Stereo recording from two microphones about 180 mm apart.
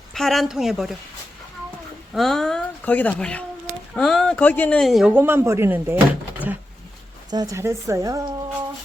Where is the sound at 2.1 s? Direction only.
Centre (ahead or behind).